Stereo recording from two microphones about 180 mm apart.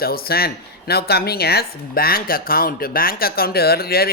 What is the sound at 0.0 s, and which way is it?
Speech, 55° left (ahead or behind).